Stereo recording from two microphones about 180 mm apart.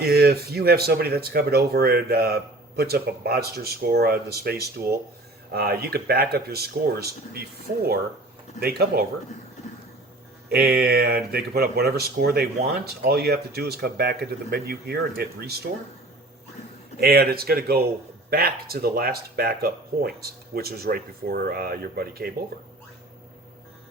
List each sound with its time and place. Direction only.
0.0 s speech: 60° right (ahead or behind)
10.5 s speech: 60° right (ahead or behind)
17.0 s speech: 60° right (ahead or behind)